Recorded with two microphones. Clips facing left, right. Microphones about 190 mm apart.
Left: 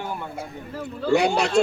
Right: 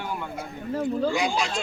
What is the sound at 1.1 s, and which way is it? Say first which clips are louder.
Speech: left 6 dB; 65° left (ahead or behind).